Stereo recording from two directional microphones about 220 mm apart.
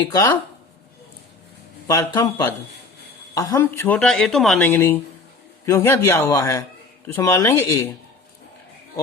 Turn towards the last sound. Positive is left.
turn(degrees=15)  # may be behind; listen again after turning